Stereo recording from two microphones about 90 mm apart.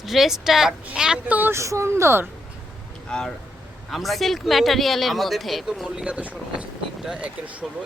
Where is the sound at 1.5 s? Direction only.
30° right (ahead or behind).